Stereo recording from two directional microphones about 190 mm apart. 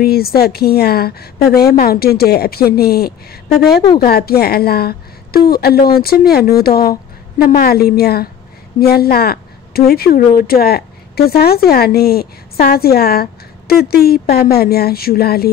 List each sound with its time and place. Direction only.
0.0 s a woman's voice: 55° left (ahead or behind)